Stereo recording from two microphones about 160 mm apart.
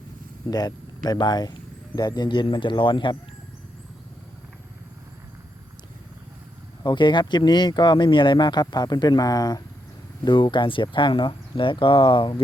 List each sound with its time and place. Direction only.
0.5 s speech: 25° left (ahead or behind)
6.8 s speech: 30° left (ahead or behind)